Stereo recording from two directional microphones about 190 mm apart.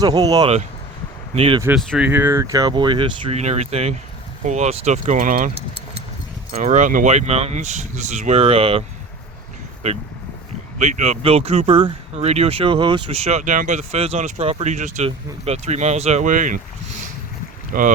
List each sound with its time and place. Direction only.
0.0 s speech: 20° right (ahead or behind)
1.7 s speech: 5° right (ahead or behind); by 5.5 s 45° right (ahead or behind)
6.5 s speech: 40° right (ahead or behind)
9.8 s speech: 35° right (ahead or behind)
17.7 s speech: 50° right (ahead or behind)